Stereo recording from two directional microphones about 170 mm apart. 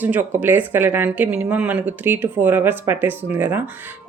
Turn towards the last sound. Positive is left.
turn(degrees=-10)  # may be behind; listen again after turning